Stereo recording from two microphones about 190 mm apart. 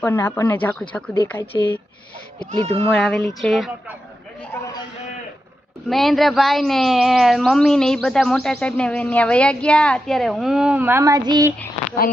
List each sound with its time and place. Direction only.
0.0 s speech: 10° left (ahead or behind)
1.4 s speech: 25° left (ahead or behind)
2.6 s speech: 30° right (ahead or behind)
2.8 s speech: 5° left (ahead or behind)
5.9 s speech: centre (ahead or behind); by 11.5 s 20° right (ahead or behind)